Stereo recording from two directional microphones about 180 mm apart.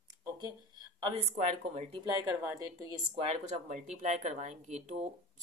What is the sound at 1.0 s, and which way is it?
A woman's voice, 35° right (ahead or behind).